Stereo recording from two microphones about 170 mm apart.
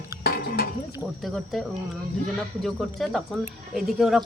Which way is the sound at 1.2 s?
Centre (ahead or behind).